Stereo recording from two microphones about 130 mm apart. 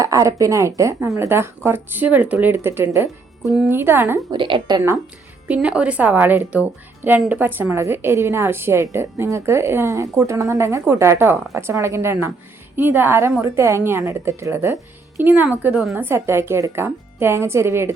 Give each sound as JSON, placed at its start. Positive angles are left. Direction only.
{"t": 0.0, "sound": "a woman's voice", "side_deg": -25}
{"t": 4.3, "sound": "a woman's voice", "side_deg": -40}
{"t": 5.5, "sound": "a woman's voice", "side_deg": -10}
{"t": 16.0, "sound": "a woman's voice", "side_deg": -20}